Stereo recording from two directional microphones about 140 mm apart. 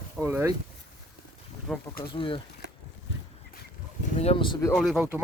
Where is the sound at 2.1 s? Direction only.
40° left (ahead or behind).